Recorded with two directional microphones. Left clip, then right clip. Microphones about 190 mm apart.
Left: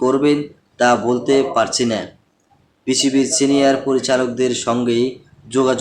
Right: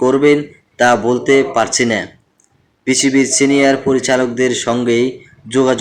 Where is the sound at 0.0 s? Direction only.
20° right (ahead or behind).